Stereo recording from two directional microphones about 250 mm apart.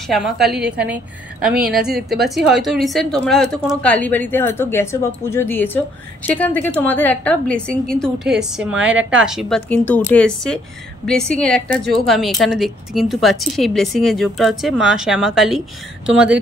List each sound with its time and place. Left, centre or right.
0.0 s a woman's voice: centre